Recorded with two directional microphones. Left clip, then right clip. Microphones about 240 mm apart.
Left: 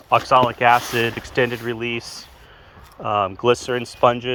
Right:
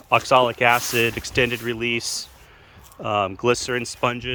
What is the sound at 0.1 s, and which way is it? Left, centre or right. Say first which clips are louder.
Speech: left 1 dB; right.